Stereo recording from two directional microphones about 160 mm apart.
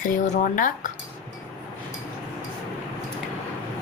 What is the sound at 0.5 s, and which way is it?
Speech, 55° left (ahead or behind).